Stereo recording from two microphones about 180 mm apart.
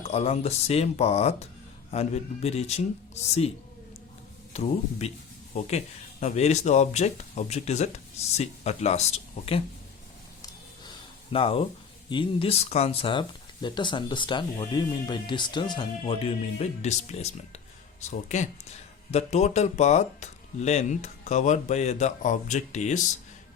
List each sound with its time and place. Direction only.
0.0 s speech: 35° left (ahead or behind)
4.5 s speech: 35° left (ahead or behind)
10.4 s a sound: 25° left (ahead or behind)
12.0 s speech: 30° left (ahead or behind)